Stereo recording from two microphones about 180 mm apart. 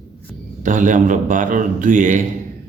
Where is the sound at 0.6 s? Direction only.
45° right (ahead or behind).